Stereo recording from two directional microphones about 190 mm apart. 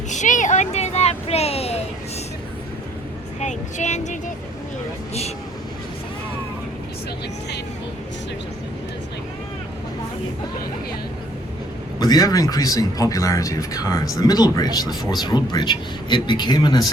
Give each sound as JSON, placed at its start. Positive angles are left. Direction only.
{"t": 0.1, "sound": "a sound", "side_deg": 40}
{"t": 3.4, "sound": "speech", "side_deg": 40}
{"t": 11.9, "sound": "speech", "side_deg": 20}